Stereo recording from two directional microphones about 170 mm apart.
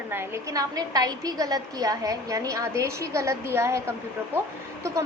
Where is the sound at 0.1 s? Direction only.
15° right (ahead or behind).